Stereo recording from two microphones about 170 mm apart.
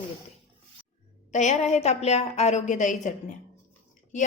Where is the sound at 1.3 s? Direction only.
45° left (ahead or behind).